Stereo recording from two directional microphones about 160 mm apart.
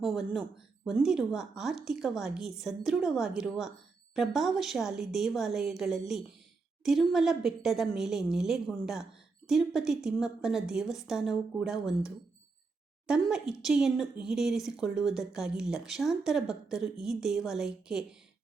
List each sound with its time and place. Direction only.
0.0 s speech: centre (ahead or behind)